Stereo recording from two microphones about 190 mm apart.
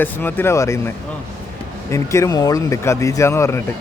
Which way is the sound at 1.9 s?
15° left (ahead or behind).